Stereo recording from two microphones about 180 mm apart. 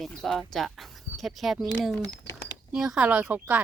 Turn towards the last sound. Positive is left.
turn(degrees=-10)  # may be behind; listen again after turning